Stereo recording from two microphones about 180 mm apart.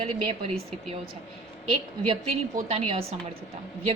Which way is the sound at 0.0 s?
35° right (ahead or behind).